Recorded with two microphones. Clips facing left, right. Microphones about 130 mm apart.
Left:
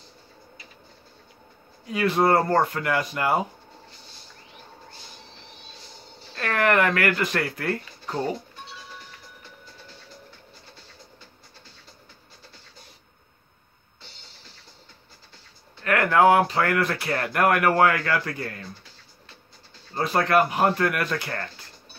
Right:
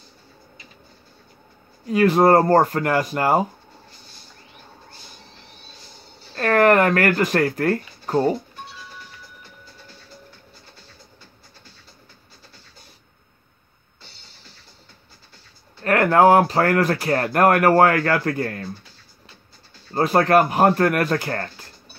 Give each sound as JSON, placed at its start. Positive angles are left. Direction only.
{"t": 1.9, "sound": "speech", "side_deg": -45}
{"t": 6.3, "sound": "speech", "side_deg": -45}
{"t": 15.8, "sound": "speech", "side_deg": -40}
{"t": 19.9, "sound": "speech", "side_deg": -50}